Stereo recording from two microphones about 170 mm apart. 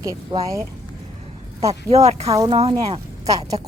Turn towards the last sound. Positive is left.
turn(degrees=-20)  # may be behind; listen again after turning